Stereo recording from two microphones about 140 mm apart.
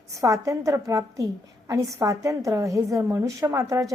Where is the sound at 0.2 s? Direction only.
25° right (ahead or behind).